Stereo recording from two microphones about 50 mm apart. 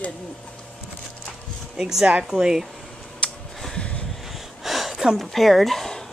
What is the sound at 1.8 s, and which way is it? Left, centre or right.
Speech, centre.